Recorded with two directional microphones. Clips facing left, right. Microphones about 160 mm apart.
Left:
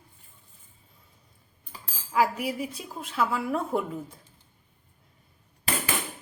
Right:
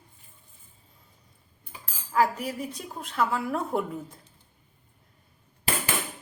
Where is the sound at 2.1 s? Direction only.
10° left (ahead or behind).